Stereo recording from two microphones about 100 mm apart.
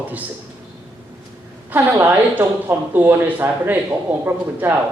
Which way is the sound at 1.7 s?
20° right (ahead or behind).